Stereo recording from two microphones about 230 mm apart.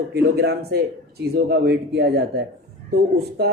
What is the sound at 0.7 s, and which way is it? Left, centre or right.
Speech, right.